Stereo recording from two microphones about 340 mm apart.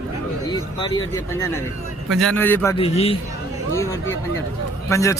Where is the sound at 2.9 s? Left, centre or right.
Centre.